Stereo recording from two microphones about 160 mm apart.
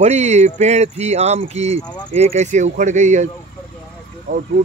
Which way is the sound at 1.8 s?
25° left (ahead or behind).